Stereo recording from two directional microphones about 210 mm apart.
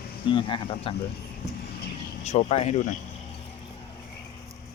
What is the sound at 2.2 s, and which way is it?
Speech, 30° left (ahead or behind).